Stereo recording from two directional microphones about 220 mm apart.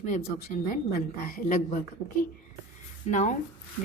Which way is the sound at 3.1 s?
35° left (ahead or behind).